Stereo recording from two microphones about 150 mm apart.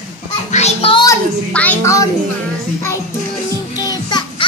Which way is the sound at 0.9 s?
20° left (ahead or behind).